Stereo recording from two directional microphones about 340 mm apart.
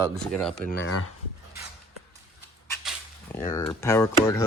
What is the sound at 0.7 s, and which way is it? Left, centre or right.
Speech, left.